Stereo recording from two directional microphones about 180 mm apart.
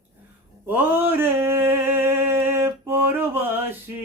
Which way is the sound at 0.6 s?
10° right (ahead or behind).